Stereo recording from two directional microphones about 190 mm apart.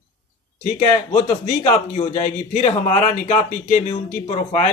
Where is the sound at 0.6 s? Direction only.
35° left (ahead or behind).